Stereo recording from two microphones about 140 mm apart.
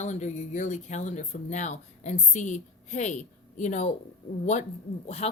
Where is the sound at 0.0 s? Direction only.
55° left (ahead or behind).